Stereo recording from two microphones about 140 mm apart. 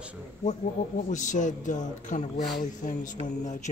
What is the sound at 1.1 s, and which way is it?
Speech, 60° left (ahead or behind).